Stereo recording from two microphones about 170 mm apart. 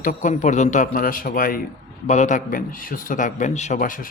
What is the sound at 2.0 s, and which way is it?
Speech, 45° left (ahead or behind).